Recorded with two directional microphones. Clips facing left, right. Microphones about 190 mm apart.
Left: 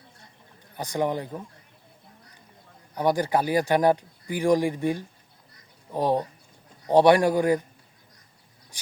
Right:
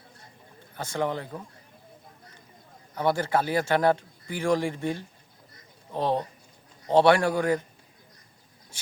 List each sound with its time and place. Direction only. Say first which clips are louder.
0.8 s speech: left 2 dB; 15° left (ahead or behind)
2.9 s speech: left 2 dB; 15° left (ahead or behind)
8.7 s a sound: even; 15° left (ahead or behind)